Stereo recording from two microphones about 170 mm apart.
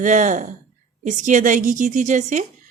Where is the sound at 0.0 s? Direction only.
50° right (ahead or behind).